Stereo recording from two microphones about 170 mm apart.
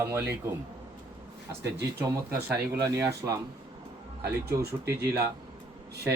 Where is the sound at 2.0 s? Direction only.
10° right (ahead or behind).